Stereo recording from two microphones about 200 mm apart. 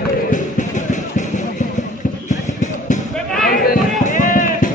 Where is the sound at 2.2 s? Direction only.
35° left (ahead or behind).